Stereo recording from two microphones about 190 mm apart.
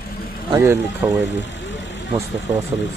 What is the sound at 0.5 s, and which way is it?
Speech, 15° right (ahead or behind).